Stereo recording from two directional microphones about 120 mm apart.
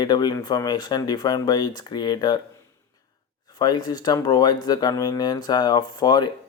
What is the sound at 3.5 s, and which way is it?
Speech, 35° left (ahead or behind).